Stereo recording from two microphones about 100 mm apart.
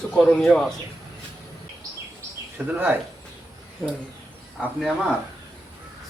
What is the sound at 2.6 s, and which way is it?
Speech, 20° right (ahead or behind).